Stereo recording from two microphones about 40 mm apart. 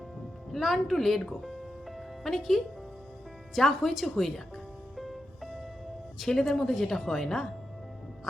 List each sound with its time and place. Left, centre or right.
0.5 s a woman's voice: centre
2.0 s music: centre
3.5 s speech: centre
4.0 s music: centre
6.1 s a woman's voice: centre